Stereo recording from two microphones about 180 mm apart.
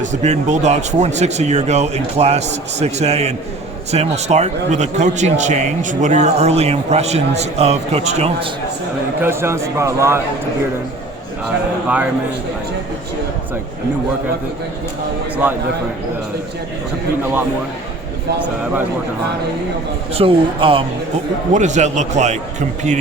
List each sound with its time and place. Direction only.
0.0 s a man's voice: 40° right (ahead or behind)
9.2 s a man's voice: 15° right (ahead or behind)
11.4 s a man's voice: 5° right (ahead or behind)
20.1 s a man's voice: 30° right (ahead or behind)
21.5 s a man's voice: 40° right (ahead or behind)